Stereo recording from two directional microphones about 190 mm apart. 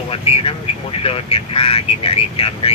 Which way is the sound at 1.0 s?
30° left (ahead or behind).